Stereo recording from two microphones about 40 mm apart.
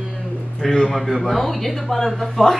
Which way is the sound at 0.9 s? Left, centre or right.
Centre.